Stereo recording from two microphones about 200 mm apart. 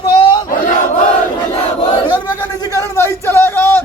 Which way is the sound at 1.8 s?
20° left (ahead or behind).